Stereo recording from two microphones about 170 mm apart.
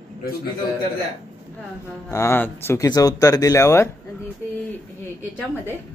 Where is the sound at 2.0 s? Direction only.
15° left (ahead or behind).